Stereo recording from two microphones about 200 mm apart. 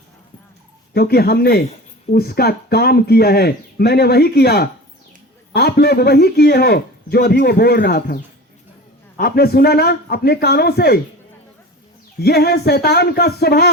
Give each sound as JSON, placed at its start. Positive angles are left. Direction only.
{"t": 0.9, "sound": "speech", "side_deg": 50}
{"t": 12.2, "sound": "speech", "side_deg": 55}